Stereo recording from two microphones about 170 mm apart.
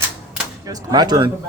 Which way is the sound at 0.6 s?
20° right (ahead or behind).